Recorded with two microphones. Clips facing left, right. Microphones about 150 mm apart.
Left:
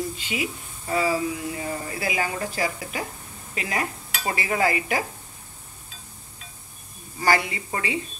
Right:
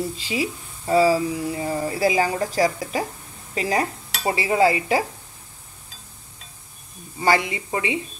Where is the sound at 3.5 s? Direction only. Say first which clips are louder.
Right 6 dB; 35° right (ahead or behind).